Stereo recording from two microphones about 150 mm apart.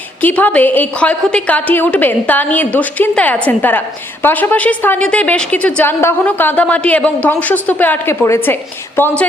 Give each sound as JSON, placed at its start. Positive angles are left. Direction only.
{"t": 0.2, "sound": "a woman's voice", "side_deg": 10}